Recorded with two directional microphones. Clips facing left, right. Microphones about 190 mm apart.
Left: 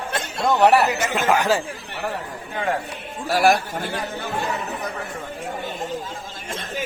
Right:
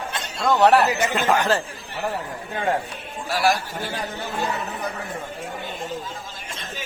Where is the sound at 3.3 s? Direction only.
50° left (ahead or behind).